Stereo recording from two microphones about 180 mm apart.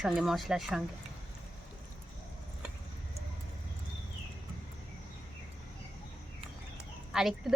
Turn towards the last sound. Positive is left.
turn(degrees=0)  # may be behind; listen again after turning